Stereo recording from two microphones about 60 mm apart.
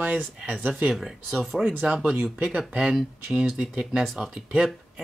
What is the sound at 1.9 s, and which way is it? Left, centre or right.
Speech, centre.